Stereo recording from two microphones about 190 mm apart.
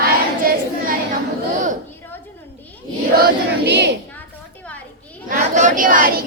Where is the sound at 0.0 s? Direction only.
50° right (ahead or behind).